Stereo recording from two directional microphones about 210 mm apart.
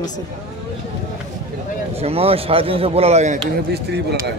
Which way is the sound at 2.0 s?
30° right (ahead or behind).